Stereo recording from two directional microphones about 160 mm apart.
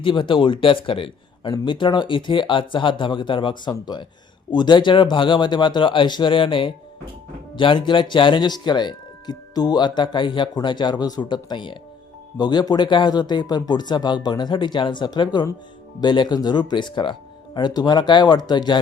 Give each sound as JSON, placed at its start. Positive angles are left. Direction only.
{"t": 0.0, "sound": "speech", "side_deg": 30}